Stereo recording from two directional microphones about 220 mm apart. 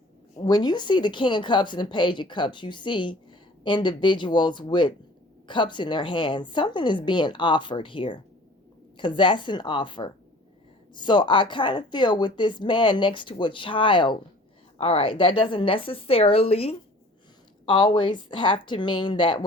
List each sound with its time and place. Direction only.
0.4 s speech: 20° left (ahead or behind)